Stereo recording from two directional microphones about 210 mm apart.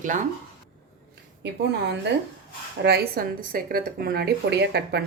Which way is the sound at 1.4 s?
55° right (ahead or behind).